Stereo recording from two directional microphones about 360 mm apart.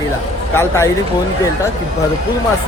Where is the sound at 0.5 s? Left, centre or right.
Centre.